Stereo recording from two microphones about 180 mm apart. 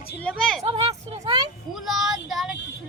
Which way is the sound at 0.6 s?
35° right (ahead or behind).